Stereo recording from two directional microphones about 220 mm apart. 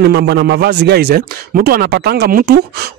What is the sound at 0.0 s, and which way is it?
A man's voice, 50° right (ahead or behind).